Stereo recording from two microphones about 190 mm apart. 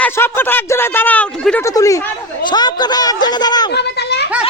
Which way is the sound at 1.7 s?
15° left (ahead or behind).